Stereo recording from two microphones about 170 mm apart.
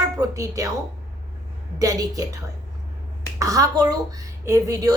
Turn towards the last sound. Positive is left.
turn(degrees=-20)  # may be behind; listen again after turning